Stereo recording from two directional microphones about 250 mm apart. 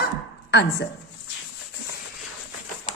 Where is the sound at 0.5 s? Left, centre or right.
Left.